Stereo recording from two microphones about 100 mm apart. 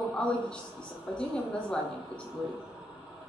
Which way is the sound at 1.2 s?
10° left (ahead or behind).